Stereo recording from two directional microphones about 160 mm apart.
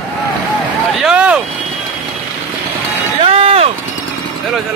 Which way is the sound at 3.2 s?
40° right (ahead or behind).